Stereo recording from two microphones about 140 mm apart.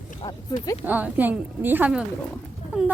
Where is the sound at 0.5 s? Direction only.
25° left (ahead or behind).